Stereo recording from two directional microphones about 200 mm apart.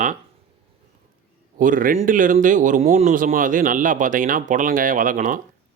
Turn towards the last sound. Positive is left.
turn(degrees=-40)  # may be behind; listen again after turning